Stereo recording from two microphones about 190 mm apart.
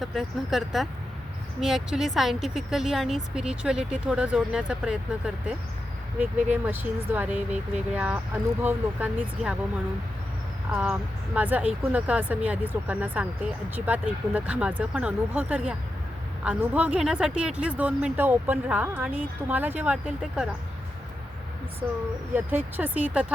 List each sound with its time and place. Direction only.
0.0 s speech: centre (ahead or behind)
10.7 s speech: 5° right (ahead or behind)
22.4 s speech: 10° right (ahead or behind)